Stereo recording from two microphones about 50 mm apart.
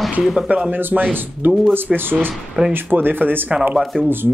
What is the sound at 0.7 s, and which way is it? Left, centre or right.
Speech, right.